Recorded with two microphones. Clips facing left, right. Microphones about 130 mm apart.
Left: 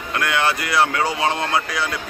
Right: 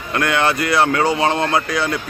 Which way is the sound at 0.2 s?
5° left (ahead or behind).